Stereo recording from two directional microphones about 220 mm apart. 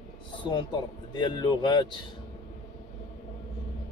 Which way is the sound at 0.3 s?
20° left (ahead or behind).